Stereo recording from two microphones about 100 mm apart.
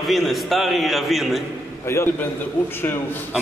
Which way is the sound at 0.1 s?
Centre (ahead or behind).